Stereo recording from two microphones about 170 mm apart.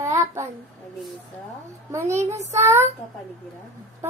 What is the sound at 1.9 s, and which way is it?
A child's voice, 15° right (ahead or behind).